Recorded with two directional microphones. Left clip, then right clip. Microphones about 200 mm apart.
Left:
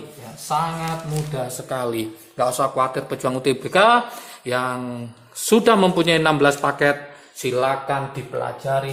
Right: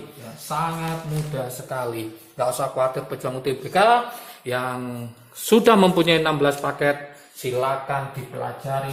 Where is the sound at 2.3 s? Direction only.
40° left (ahead or behind).